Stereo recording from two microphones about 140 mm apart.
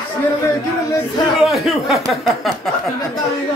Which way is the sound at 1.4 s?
Centre (ahead or behind).